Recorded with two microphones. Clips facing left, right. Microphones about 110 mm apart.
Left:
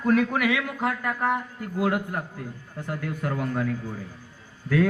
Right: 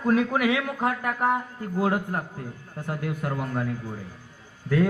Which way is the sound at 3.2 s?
5° right (ahead or behind).